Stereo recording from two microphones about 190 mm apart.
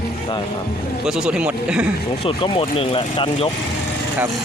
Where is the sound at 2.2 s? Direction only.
25° left (ahead or behind).